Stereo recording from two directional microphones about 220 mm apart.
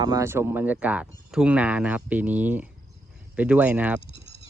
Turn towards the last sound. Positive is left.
turn(degrees=-5)  # may be behind; listen again after turning